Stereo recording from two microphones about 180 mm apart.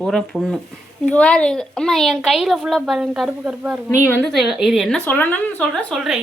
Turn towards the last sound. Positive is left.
turn(degrees=0)  # may be behind; listen again after turning